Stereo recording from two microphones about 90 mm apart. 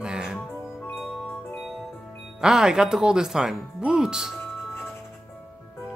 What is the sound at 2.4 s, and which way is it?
Speech, 5° right (ahead or behind).